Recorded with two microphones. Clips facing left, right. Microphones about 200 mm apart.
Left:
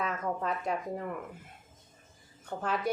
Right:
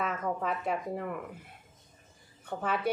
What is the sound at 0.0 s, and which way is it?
A woman's voice, 5° right (ahead or behind).